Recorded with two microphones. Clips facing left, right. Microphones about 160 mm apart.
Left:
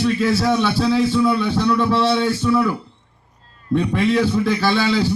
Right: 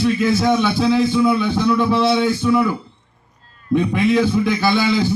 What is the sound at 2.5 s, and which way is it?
Speech, 15° right (ahead or behind).